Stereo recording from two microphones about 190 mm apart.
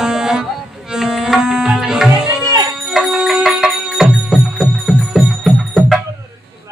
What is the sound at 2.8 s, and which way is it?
Music, 5° right (ahead or behind).